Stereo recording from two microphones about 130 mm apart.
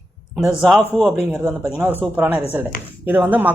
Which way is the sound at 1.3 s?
20° right (ahead or behind).